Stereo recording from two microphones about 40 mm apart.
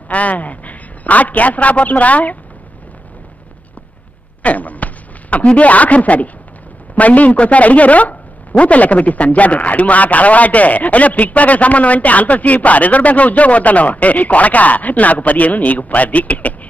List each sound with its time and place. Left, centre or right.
0.1 s speech: left
4.4 s a sound: left
7.0 s speech: left